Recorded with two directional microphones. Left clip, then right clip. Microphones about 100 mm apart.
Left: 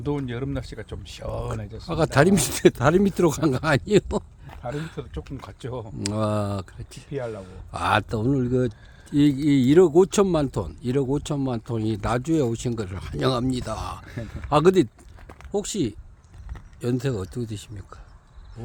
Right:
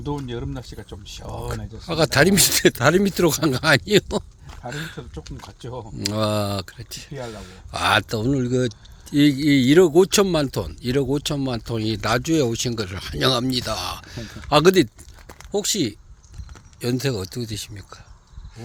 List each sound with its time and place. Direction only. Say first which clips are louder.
0.0 s speech: left 1 dB; 60° left (ahead or behind)
1.5 s speech: right 2 dB; 10° left (ahead or behind)
5.4 s speech: even; 60° left (ahead or behind)
6.0 s speech: right 4 dB; centre (ahead or behind)